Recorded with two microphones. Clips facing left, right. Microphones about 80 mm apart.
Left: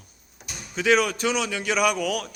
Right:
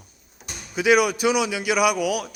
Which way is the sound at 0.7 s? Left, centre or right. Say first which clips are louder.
Right 3 dB; centre.